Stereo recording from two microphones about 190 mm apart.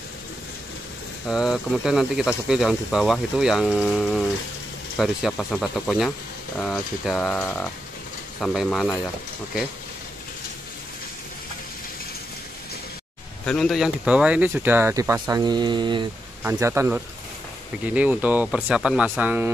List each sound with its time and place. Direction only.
1.3 s speech: centre (ahead or behind)
13.5 s speech: centre (ahead or behind); by 16.1 s 25° right (ahead or behind)
16.4 s speech: 15° right (ahead or behind)